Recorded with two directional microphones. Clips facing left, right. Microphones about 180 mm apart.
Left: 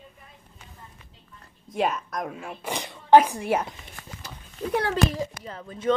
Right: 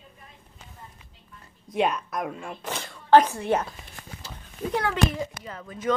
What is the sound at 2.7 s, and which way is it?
Speech, 15° left (ahead or behind).